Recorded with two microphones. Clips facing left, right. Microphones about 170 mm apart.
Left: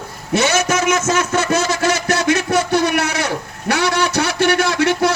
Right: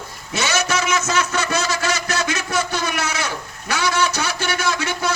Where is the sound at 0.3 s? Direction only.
55° left (ahead or behind).